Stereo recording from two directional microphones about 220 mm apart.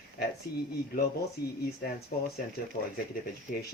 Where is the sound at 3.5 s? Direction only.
40° left (ahead or behind).